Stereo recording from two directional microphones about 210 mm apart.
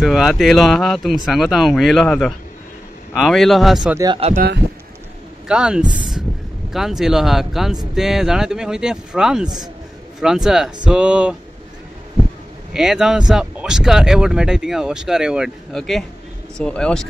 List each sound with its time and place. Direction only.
0.0 s speech: centre (ahead or behind)
4.0 s speech: 25° right (ahead or behind)
5.5 s speech: 5° right (ahead or behind)
12.7 s speech: centre (ahead or behind)